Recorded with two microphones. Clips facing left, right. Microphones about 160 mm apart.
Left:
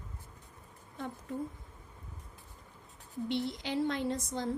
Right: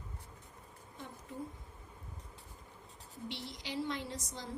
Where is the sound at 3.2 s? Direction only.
55° left (ahead or behind).